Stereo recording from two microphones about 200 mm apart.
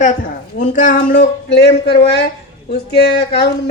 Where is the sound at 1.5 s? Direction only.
55° left (ahead or behind).